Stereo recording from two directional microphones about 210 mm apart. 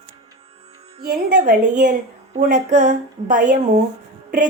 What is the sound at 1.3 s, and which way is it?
A woman's voice, 40° right (ahead or behind).